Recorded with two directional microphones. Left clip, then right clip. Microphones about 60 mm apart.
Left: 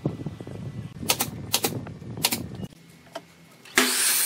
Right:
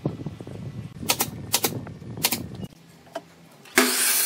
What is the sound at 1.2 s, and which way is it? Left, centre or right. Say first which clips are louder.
Typewriter: right 1 dB; centre.